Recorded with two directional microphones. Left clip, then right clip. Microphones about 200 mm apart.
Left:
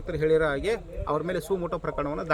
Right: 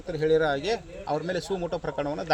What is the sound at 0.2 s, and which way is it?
A man's voice, 30° left (ahead or behind).